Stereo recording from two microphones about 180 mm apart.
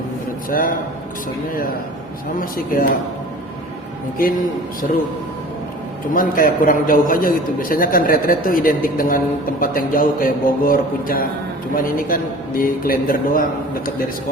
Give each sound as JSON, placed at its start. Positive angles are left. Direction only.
{"t": 0.5, "sound": "a man's voice", "side_deg": 50}
{"t": 2.4, "sound": "a man's voice", "side_deg": 50}
{"t": 6.1, "sound": "a man's voice", "side_deg": 50}